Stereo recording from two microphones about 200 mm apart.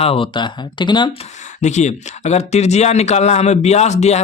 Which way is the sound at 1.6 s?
35° left (ahead or behind).